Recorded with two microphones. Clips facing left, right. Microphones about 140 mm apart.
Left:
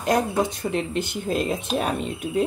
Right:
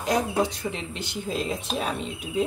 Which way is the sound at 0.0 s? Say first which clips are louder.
Left 2 dB; 50° left (ahead or behind).